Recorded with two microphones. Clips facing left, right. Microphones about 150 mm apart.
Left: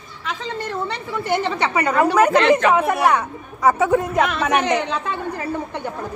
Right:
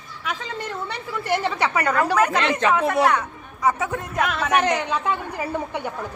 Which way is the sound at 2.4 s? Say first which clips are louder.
Left 6 dB; 55° left (ahead or behind).